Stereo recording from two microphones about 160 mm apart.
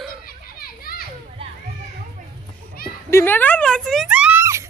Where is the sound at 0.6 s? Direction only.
70° left (ahead or behind).